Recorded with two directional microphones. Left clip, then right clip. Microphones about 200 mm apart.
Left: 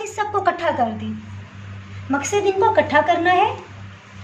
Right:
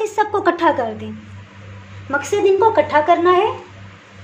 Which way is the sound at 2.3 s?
35° right (ahead or behind).